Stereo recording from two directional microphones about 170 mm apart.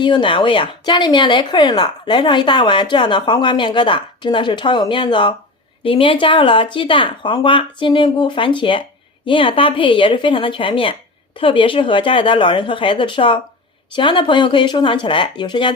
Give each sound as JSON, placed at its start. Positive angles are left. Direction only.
{"t": 0.0, "sound": "speech", "side_deg": 30}